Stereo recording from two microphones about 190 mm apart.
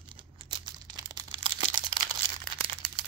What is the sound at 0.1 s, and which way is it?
Crumpling, 25° right (ahead or behind).